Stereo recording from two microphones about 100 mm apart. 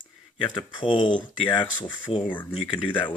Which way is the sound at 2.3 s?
15° left (ahead or behind).